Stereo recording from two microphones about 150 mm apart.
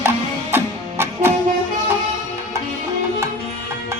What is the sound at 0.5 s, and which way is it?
Music, 15° right (ahead or behind).